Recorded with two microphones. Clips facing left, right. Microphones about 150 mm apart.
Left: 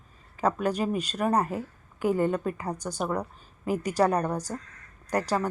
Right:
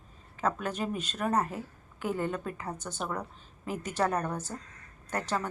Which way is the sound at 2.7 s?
35° left (ahead or behind).